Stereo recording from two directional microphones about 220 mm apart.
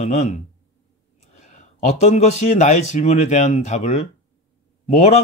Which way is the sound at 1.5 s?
30° left (ahead or behind).